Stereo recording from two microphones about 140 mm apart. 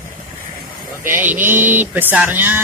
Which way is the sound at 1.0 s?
15° right (ahead or behind).